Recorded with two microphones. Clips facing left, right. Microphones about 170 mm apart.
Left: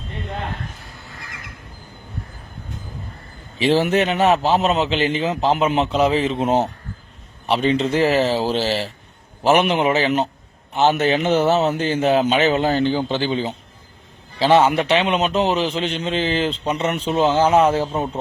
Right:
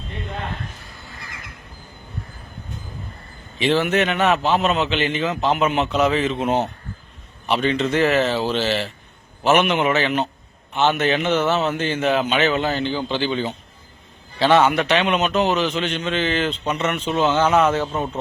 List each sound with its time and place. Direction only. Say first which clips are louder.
3.6 s a man's voice: left 2 dB; 35° left (ahead or behind)
14.3 s a man's voice: left 1 dB; 30° left (ahead or behind)
17.9 s a man's voice: left 2 dB; 20° left (ahead or behind)